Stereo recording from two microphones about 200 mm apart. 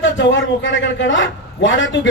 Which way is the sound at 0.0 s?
70° left (ahead or behind).